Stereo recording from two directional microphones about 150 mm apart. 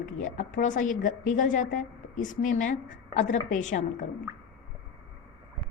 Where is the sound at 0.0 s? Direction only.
55° left (ahead or behind).